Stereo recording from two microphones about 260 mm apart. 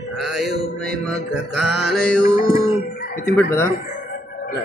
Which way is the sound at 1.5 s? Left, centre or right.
Centre.